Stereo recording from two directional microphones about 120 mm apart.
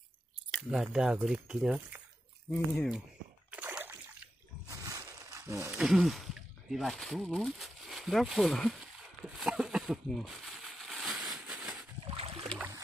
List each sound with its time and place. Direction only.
0.5 s speech: 5° right (ahead or behind)
2.5 s speech: 10° left (ahead or behind)
3.4 s splash: 10° right (ahead or behind)
4.6 s a sound: 25° right (ahead or behind)
5.8 s speech: centre (ahead or behind)
11.3 s a sound: 5° right (ahead or behind)
12.0 s boat: 50° right (ahead or behind)